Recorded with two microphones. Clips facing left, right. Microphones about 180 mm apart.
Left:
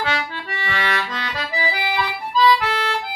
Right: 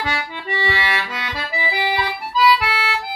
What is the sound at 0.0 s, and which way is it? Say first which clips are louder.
Music: left 1 dB; 15° right (ahead or behind).